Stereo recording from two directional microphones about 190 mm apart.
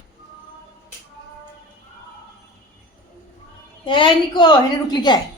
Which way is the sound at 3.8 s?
25° left (ahead or behind).